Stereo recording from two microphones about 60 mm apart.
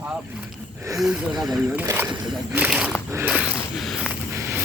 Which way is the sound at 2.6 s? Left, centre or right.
Centre.